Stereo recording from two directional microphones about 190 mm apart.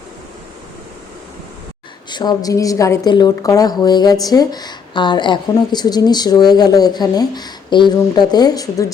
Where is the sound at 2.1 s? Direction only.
20° left (ahead or behind).